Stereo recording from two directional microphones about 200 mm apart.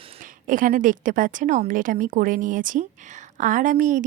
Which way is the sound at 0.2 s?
40° right (ahead or behind).